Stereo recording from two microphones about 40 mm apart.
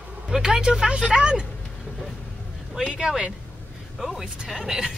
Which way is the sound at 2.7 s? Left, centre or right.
Centre.